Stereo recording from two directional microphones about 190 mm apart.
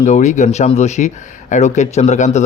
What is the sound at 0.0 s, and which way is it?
Speech, 40° left (ahead or behind).